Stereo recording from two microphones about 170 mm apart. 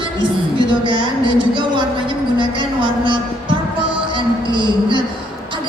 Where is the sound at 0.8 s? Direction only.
30° right (ahead or behind).